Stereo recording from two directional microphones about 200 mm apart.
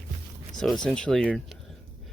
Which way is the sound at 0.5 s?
Centre (ahead or behind).